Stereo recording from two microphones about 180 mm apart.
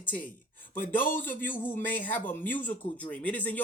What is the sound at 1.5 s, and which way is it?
Speech, 10° left (ahead or behind).